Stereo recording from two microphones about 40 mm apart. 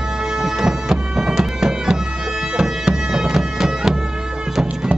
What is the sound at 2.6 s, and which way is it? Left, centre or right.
Bagpipes, centre.